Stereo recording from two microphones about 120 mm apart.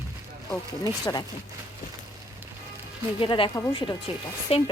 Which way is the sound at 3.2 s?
45° left (ahead or behind).